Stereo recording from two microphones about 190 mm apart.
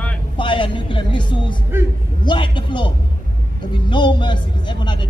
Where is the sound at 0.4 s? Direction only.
25° left (ahead or behind).